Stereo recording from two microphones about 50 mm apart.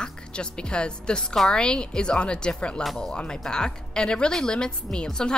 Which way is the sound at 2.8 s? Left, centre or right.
Centre.